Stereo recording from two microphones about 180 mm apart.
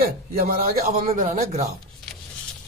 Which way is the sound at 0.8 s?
40° right (ahead or behind).